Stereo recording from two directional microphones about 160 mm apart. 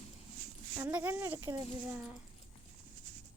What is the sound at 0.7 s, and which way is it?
Speech, 10° right (ahead or behind).